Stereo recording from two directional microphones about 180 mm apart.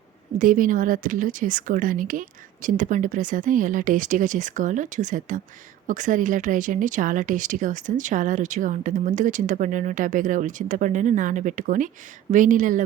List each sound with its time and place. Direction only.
0.3 s speech: 50° right (ahead or behind)